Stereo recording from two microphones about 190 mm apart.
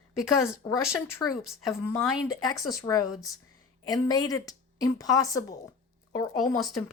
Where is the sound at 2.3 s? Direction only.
20° left (ahead or behind).